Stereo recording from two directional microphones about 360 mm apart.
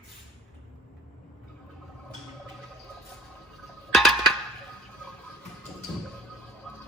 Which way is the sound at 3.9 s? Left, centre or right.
Centre.